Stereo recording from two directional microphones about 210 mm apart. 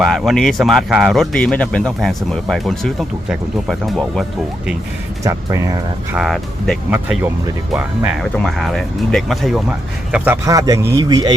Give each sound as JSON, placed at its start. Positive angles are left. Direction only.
{"t": 0.0, "sound": "speech", "side_deg": 0}
{"t": 5.2, "sound": "speech", "side_deg": -15}
{"t": 6.1, "sound": "speech", "side_deg": 0}